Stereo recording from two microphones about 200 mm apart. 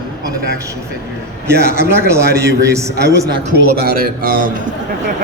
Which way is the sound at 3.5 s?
50° right (ahead or behind).